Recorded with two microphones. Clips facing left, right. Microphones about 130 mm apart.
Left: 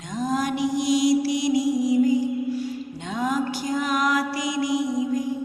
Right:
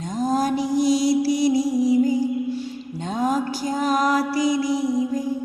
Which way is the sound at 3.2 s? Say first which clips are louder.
Right 2 dB; 35° right (ahead or behind).